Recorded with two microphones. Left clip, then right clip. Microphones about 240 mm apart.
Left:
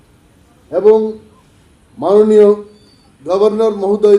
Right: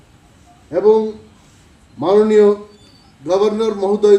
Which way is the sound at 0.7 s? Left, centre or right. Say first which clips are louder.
Left 3 dB; left.